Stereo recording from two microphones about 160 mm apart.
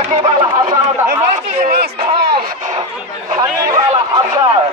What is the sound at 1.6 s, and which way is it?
Speech, 80° right.